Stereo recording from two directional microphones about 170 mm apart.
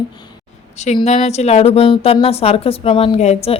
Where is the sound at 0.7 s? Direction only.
40° left (ahead or behind).